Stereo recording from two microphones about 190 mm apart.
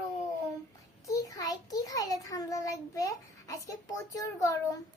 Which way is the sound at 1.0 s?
20° left (ahead or behind).